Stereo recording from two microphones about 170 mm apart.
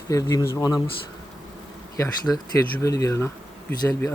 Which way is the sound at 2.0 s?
20° left (ahead or behind).